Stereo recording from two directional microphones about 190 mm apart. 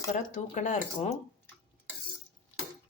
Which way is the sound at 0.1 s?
40° left (ahead or behind).